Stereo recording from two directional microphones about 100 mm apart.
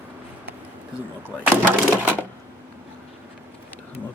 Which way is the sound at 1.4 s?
20° right (ahead or behind).